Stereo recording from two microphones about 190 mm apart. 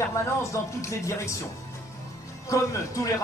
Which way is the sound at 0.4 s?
15° left (ahead or behind).